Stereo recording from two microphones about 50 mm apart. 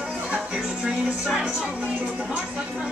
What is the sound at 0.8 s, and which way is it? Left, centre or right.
Music, centre.